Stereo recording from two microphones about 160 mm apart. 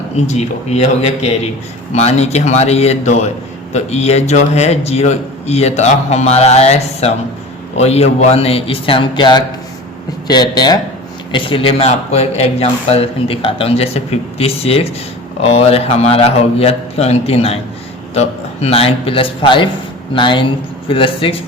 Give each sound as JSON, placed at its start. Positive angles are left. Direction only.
{"t": 0.3, "sound": "a man's voice", "side_deg": 45}
{"t": 20.8, "sound": "speech", "side_deg": 35}